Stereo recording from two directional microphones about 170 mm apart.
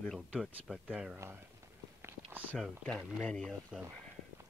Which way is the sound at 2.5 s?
5° left (ahead or behind).